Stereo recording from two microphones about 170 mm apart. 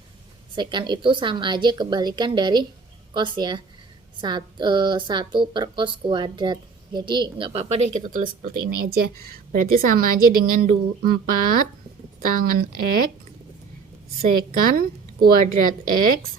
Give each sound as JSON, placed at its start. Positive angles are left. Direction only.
{"t": 0.5, "sound": "a woman's voice", "side_deg": -25}
{"t": 14.2, "sound": "speech", "side_deg": -60}